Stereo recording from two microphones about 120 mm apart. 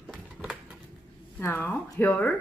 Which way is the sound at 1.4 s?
15° left (ahead or behind).